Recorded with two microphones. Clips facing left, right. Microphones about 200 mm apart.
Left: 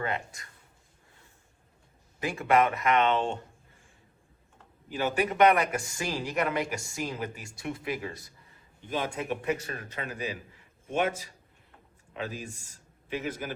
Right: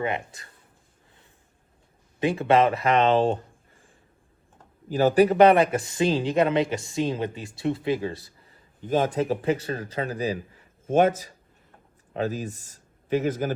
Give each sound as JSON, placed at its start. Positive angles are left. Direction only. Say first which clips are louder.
{"t": 2.1, "sound": "speech", "louder": "right 5 dB", "side_deg": -25}
{"t": 4.9, "sound": "speech", "louder": "right 10 dB", "side_deg": -40}
{"t": 8.8, "sound": "speech", "louder": "right 9 dB", "side_deg": -45}